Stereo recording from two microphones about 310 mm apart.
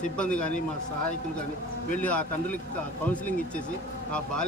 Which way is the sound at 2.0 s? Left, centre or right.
Centre.